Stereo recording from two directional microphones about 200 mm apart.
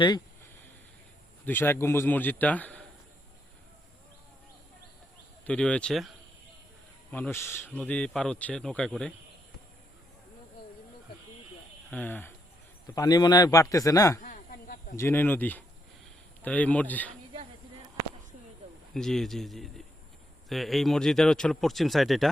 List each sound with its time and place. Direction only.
1.5 s a man's voice: 10° left (ahead or behind)
5.5 s speech: 5° left (ahead or behind)
7.1 s speech: 10° left (ahead or behind)
11.9 s a man's voice: 10° left (ahead or behind)
14.2 s a sound: 40° left (ahead or behind)
14.9 s a man's voice: 10° left (ahead or behind)
18.9 s speech: centre (ahead or behind)